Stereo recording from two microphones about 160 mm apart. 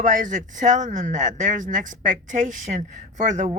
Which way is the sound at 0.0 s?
55° right (ahead or behind).